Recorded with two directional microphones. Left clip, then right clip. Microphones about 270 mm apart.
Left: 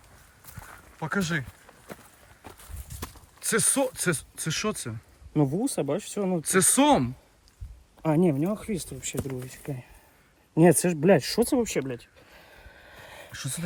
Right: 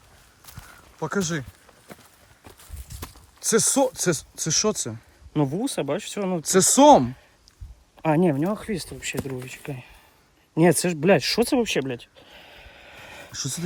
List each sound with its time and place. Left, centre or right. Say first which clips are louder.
0.9 s speech: right 2 dB; centre
1.6 s walk: left 1 dB; centre
3.4 s speech: right 5 dB; centre
8.0 s speech: right 3 dB; right
8.8 s speech: right 4 dB; centre
11.5 s speech: right 4 dB; centre
12.3 s a sound: right 4 dB; right
13.3 s speech: right 6 dB; centre